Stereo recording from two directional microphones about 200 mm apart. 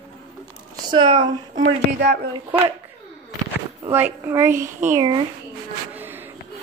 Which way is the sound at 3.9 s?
10° right (ahead or behind).